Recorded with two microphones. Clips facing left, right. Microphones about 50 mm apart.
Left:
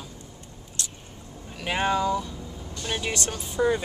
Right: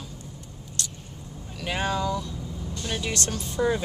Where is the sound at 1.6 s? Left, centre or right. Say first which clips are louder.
Left 3 dB; centre.